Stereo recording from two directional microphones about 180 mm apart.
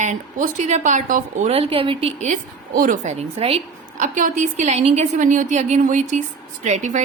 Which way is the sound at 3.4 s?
35° right (ahead or behind).